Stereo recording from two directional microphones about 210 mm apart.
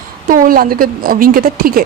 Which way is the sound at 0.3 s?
45° right (ahead or behind).